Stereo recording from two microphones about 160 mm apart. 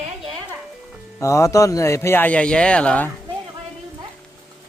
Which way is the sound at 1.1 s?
20° left (ahead or behind).